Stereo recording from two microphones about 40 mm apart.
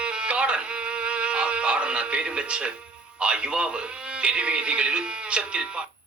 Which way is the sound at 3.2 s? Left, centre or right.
Right.